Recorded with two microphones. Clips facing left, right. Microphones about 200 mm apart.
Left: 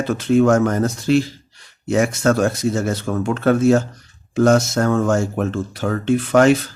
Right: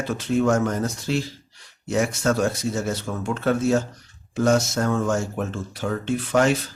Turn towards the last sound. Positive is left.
turn(degrees=70)  # may be behind; listen again after turning